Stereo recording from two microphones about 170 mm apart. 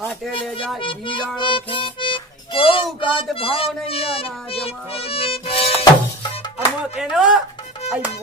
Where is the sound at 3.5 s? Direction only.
35° left (ahead or behind).